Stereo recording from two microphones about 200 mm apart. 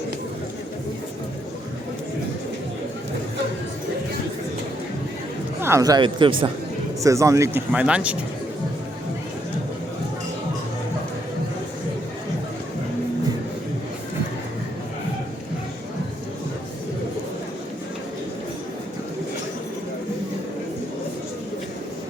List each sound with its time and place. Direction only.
5.5 s speech: 15° right (ahead or behind)